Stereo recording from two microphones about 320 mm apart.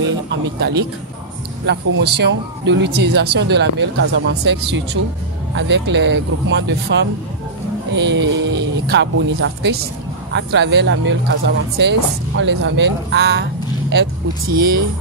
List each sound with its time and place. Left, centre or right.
0.6 s speech: right